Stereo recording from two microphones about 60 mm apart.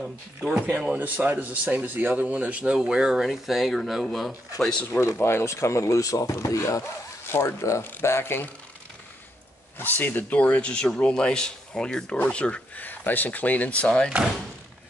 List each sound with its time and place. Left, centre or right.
0.0 s speech: centre
0.9 s speech: right; by 4.3 s centre
4.6 s speech: centre
5.1 s speech: left
7.2 s speech: left
9.8 s speech: left